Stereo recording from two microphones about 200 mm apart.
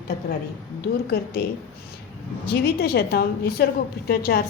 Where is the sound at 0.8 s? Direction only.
50° left (ahead or behind).